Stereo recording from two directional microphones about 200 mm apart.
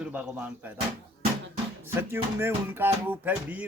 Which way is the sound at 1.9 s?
10° right (ahead or behind).